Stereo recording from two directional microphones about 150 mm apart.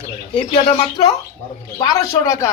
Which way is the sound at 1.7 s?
25° left (ahead or behind).